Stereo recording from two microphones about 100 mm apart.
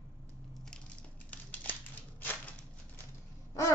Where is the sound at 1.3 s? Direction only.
15° left (ahead or behind).